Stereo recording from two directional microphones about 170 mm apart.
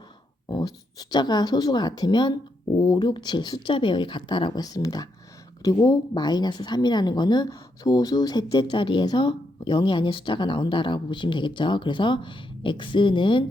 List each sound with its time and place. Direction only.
0.4 s a woman's voice: 25° left (ahead or behind)